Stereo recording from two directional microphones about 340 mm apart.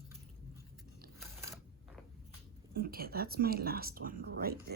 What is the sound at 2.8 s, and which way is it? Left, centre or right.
Speech, right.